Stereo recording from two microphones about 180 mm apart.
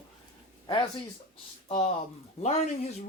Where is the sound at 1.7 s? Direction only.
35° left (ahead or behind).